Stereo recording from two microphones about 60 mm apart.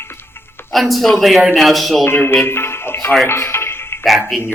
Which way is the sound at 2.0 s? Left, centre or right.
Left.